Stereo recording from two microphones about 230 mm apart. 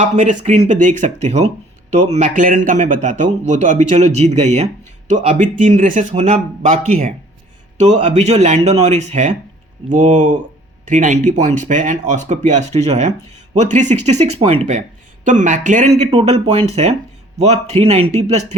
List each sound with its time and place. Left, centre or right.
0.0 s a man's voice: right